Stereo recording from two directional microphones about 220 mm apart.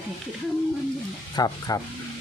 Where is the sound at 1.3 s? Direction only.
15° left (ahead or behind).